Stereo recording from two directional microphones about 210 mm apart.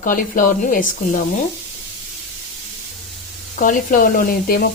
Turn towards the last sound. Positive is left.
turn(degrees=40)  # may be behind; listen again after turning